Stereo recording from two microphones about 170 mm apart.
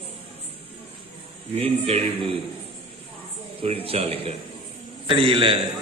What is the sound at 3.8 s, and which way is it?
A man's voice, 35° right (ahead or behind).